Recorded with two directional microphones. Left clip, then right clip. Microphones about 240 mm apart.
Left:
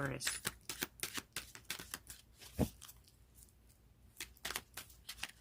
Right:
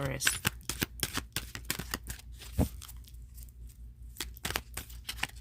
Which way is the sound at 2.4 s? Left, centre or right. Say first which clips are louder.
Right 4 dB; centre.